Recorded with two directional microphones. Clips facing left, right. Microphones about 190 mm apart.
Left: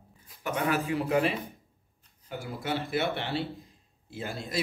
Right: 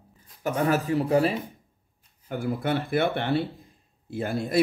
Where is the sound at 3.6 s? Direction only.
55° right (ahead or behind).